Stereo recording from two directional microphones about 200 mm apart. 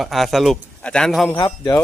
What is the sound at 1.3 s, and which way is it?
Speech, 15° left (ahead or behind).